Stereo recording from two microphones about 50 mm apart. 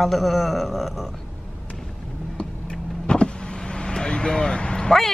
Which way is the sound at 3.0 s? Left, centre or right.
Centre.